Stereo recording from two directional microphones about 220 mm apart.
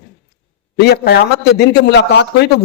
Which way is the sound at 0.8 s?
45° left (ahead or behind).